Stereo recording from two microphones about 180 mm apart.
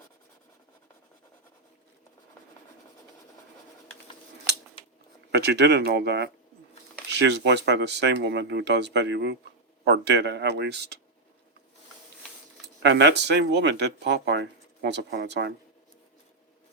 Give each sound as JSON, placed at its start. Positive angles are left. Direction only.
{"t": 5.3, "sound": "speech", "side_deg": -65}
{"t": 12.8, "sound": "speech", "side_deg": -75}